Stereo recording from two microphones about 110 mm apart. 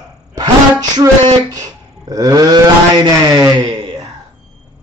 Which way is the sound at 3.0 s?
35° right (ahead or behind).